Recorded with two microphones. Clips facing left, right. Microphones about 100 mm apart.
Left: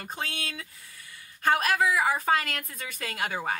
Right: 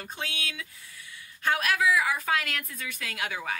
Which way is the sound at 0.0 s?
40° left (ahead or behind).